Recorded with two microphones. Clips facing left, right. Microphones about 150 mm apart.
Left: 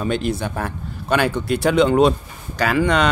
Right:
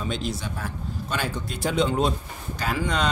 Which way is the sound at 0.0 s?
60° left (ahead or behind).